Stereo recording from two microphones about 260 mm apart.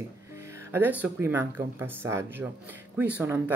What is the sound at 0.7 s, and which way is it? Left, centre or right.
Speech, centre.